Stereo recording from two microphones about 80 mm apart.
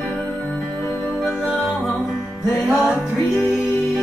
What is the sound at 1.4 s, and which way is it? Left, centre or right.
Music, centre.